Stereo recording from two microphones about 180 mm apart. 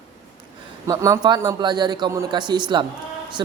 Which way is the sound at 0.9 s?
15° right (ahead or behind).